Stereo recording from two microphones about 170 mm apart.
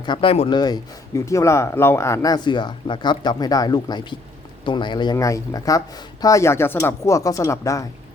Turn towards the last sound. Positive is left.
turn(degrees=20)  # may be behind; listen again after turning